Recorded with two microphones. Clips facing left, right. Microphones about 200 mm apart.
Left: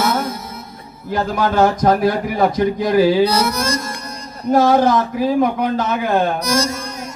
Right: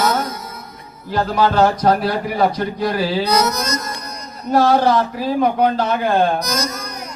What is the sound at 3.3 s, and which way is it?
Mantra, 30° left (ahead or behind).